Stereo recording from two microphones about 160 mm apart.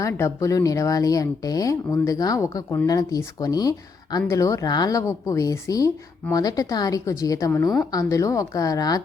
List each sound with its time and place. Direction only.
0.0 s speech: 15° left (ahead or behind)